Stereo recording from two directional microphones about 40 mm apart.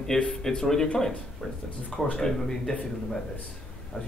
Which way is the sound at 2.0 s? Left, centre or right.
Centre.